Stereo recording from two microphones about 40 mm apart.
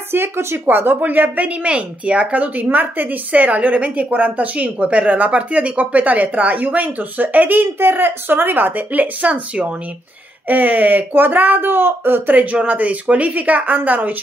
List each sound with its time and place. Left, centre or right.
0.1 s a woman's voice: right
10.5 s speech: right
12.5 s a woman's voice: right